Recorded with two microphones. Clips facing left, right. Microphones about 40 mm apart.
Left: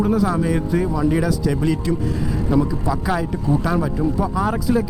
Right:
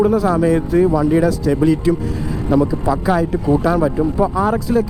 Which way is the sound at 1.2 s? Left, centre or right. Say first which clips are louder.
Right 5 dB; centre.